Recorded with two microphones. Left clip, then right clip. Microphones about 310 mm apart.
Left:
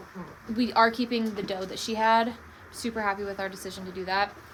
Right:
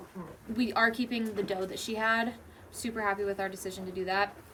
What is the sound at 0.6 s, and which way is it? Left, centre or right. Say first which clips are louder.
A woman's voice: left 5 dB; centre.